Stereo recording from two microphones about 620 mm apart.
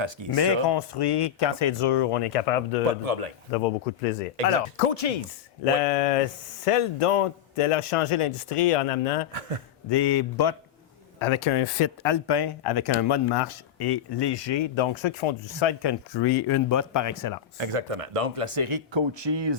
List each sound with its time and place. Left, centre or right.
0.0 s speech: right
0.3 s speech: left
3.0 s speech: right
4.8 s a man's voice: left
9.9 s speech: left
11.2 s speech: left
17.6 s speech: right